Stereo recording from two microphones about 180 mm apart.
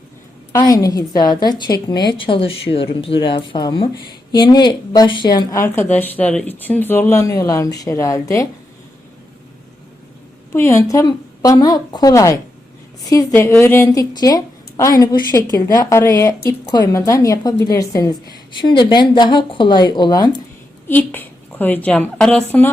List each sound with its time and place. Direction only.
0.5 s a woman's voice: 20° left (ahead or behind)
10.5 s a woman's voice: 15° left (ahead or behind)
20.8 s a woman's voice: 10° left (ahead or behind)